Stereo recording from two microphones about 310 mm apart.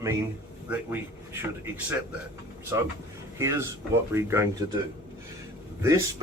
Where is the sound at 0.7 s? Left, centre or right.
Centre.